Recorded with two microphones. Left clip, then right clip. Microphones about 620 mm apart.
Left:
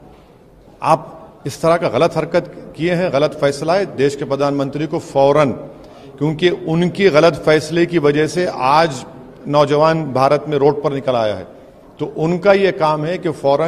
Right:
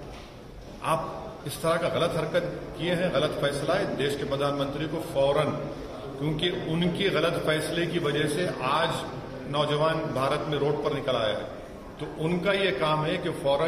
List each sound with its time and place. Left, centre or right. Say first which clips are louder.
1.6 s a man's voice: left 12 dB; left